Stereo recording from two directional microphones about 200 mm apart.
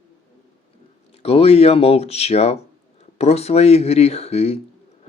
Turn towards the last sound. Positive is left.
turn(degrees=30)  # may be behind; listen again after turning